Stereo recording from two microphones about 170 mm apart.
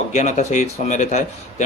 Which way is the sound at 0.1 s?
45° left (ahead or behind).